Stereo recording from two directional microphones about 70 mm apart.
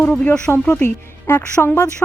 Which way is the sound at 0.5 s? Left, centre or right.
Centre.